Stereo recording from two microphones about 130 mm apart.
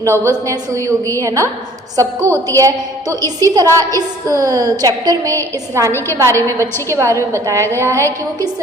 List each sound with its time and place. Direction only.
0.0 s a woman's voice: 20° right (ahead or behind)